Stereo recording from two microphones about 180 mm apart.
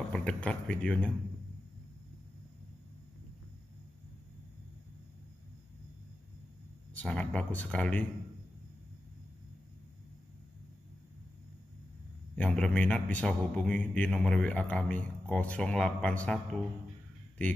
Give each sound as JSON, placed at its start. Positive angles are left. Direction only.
{"t": 0.1, "sound": "speech", "side_deg": 5}
{"t": 6.9, "sound": "a man's voice", "side_deg": 5}
{"t": 12.4, "sound": "a man's voice", "side_deg": 5}